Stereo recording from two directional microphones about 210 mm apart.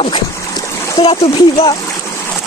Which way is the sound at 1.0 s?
15° left (ahead or behind).